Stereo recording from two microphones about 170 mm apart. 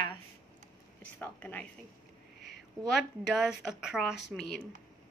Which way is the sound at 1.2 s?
10° left (ahead or behind).